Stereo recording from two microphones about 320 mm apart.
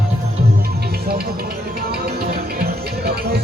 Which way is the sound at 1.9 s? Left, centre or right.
Right.